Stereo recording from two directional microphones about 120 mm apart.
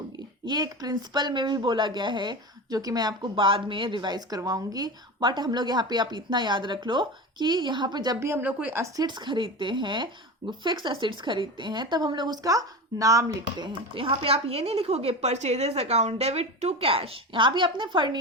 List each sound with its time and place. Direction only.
0.4 s speech: 35° right (ahead or behind)
8.2 s a woman's voice: 20° right (ahead or behind)
9.0 s speech: 40° right (ahead or behind)
13.9 s a woman's voice: 50° right (ahead or behind)